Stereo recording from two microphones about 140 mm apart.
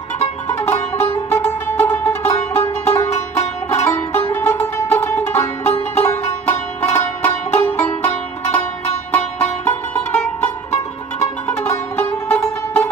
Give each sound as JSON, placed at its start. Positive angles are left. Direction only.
{"t": 0.5, "sound": "music", "side_deg": 15}
{"t": 9.1, "sound": "music", "side_deg": 15}